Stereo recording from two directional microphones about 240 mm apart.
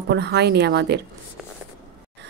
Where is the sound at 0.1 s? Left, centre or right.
Right.